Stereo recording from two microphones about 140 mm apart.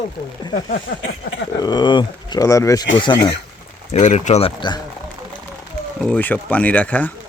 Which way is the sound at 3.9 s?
55° left (ahead or behind).